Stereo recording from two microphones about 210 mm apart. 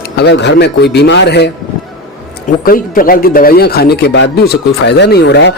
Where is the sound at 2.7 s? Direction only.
40° left (ahead or behind).